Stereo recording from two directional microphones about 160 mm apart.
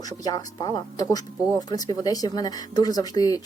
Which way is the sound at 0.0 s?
25° left (ahead or behind).